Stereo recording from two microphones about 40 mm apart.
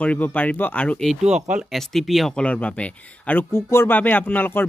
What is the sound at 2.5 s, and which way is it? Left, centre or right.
Speech, left.